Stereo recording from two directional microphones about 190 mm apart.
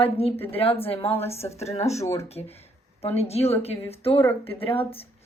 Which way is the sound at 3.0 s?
30° left (ahead or behind).